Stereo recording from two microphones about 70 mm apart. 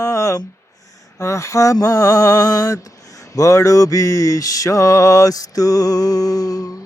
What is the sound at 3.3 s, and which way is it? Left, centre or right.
Mantra, left.